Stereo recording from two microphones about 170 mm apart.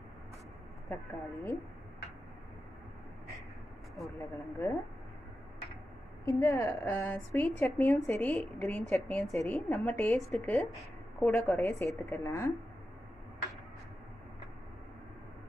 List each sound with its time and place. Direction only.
0.8 s a woman's voice: 15° left (ahead or behind)
4.2 s a woman's voice: 15° left (ahead or behind)
6.2 s a woman's voice: 15° left (ahead or behind)
9.3 s a woman's voice: 15° left (ahead or behind)